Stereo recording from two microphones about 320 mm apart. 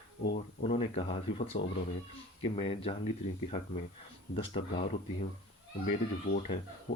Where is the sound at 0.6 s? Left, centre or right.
Centre.